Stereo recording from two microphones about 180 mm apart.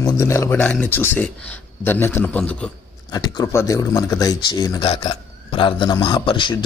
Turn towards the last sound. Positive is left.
turn(degrees=25)  # may be behind; listen again after turning